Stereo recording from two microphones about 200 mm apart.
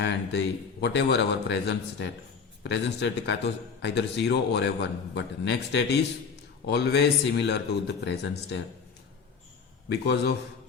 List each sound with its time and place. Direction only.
0.0 s a man's voice: 60° left (ahead or behind)
9.9 s a man's voice: 55° left (ahead or behind)